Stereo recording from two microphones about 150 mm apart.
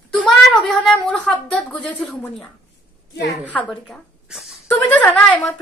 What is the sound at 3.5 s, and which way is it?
A woman's voice, 5° left (ahead or behind).